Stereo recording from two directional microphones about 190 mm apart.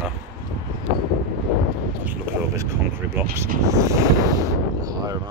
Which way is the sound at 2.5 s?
15° right (ahead or behind).